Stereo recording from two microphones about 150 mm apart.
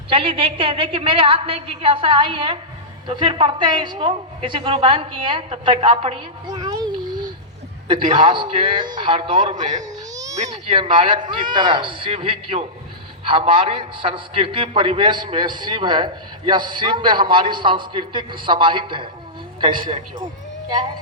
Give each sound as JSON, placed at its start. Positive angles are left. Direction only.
{"t": 0.1, "sound": "a man's voice", "side_deg": -35}
{"t": 6.5, "sound": "a sound", "side_deg": -30}
{"t": 8.1, "sound": "a man's voice", "side_deg": -30}
{"t": 9.6, "sound": "speech", "side_deg": -55}
{"t": 10.7, "sound": "a man's voice", "side_deg": -35}